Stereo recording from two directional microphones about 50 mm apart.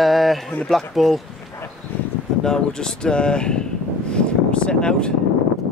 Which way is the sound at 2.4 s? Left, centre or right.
Centre.